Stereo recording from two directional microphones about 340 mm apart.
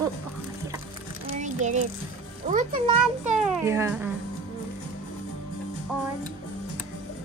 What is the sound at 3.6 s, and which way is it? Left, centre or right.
Speech, centre.